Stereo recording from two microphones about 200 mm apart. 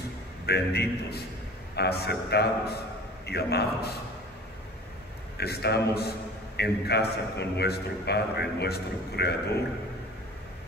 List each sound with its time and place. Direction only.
0.5 s a man's voice: 55° left (ahead or behind)
5.4 s a man's voice: 55° left (ahead or behind)